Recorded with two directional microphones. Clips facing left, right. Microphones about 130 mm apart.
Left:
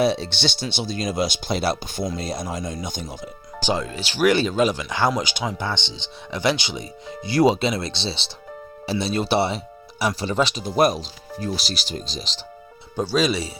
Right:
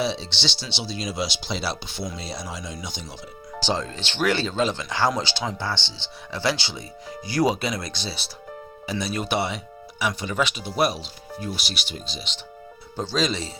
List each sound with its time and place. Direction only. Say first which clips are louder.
0.0 s speech: left 6 dB; 55° left (ahead or behind)
3.6 s speech: left 2 dB; 10° left (ahead or behind); by 12.5 s 35° left (ahead or behind)
13.0 s speech: left 4 dB; 10° left (ahead or behind)